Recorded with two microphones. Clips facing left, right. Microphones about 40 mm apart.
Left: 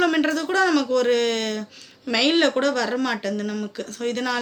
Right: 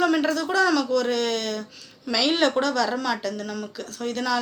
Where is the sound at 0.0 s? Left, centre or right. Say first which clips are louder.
Left 1 dB; left.